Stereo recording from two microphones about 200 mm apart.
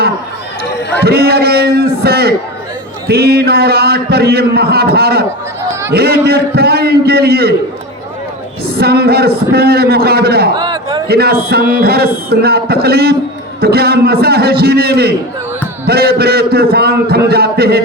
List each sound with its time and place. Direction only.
1.0 s a man's voice: 50° right (ahead or behind)
8.7 s a man's voice: 50° right (ahead or behind)
10.6 s a sound: 20° right (ahead or behind)
11.1 s a man's voice: 50° right (ahead or behind)